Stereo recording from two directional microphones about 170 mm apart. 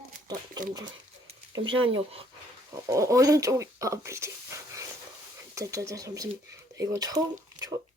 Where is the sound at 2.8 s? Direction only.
20° right (ahead or behind).